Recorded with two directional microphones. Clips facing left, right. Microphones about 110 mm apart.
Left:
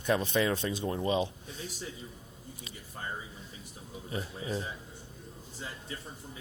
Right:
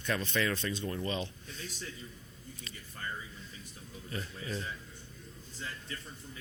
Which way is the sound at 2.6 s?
20° left (ahead or behind).